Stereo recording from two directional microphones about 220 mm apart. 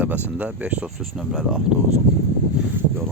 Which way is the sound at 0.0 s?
5° right (ahead or behind).